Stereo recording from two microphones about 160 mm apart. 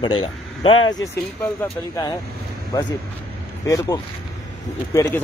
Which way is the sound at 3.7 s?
20° left (ahead or behind).